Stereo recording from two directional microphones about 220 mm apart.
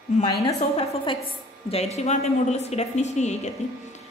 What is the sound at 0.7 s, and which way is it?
A woman's voice, 25° left (ahead or behind).